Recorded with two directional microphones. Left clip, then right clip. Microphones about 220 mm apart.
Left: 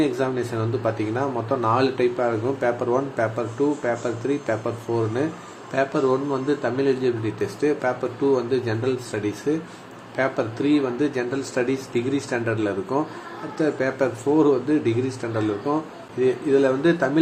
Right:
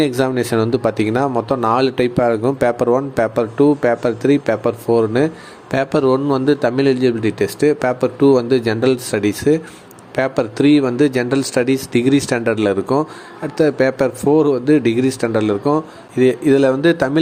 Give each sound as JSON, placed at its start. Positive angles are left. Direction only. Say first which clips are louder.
{"t": 0.0, "sound": "speech", "louder": "right 6 dB", "side_deg": -40}